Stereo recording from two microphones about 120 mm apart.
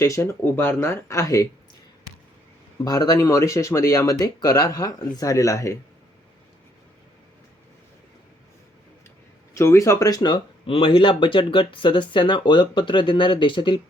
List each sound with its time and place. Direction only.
0.0 s speech: 25° left (ahead or behind)
2.8 s speech: 35° left (ahead or behind)
9.6 s speech: 25° left (ahead or behind)
10.2 s speech: 45° left (ahead or behind)